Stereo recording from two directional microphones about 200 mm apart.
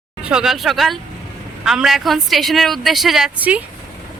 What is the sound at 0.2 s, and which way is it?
A woman's voice, 5° right (ahead or behind).